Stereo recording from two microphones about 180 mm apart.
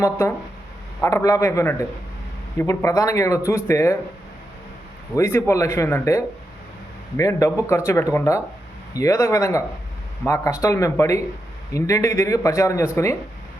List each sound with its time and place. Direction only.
0.0 s speech: 15° left (ahead or behind)
5.1 s speech: 15° left (ahead or behind)